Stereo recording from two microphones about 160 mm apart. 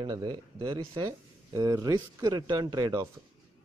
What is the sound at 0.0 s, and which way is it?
A man's voice, 25° right (ahead or behind).